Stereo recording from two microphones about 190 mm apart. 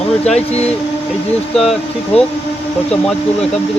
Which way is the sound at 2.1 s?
35° left (ahead or behind).